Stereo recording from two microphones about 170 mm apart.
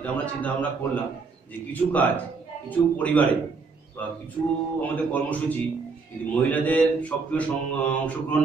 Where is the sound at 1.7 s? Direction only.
10° left (ahead or behind).